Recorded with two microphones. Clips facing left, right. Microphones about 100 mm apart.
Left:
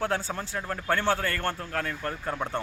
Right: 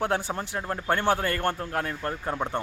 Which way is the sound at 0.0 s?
20° right (ahead or behind).